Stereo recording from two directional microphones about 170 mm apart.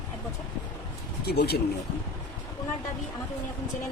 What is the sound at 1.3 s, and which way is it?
Speech, 70° left (ahead or behind).